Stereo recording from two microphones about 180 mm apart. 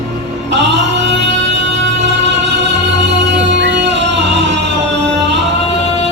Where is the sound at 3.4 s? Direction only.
80° right.